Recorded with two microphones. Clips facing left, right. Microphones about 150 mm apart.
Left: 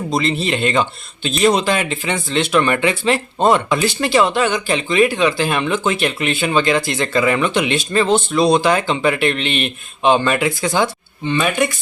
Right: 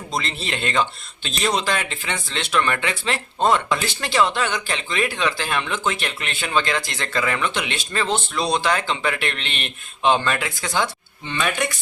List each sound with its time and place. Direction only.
0.1 s speech: 5° left (ahead or behind)